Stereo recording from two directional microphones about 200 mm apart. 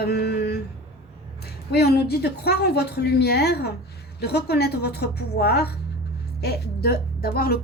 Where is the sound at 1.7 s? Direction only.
55° left (ahead or behind).